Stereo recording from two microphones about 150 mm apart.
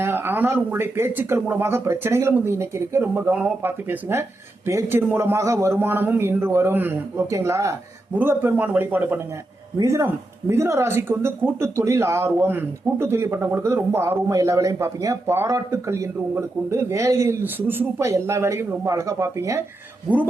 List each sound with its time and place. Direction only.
0.0 s speech: 15° right (ahead or behind)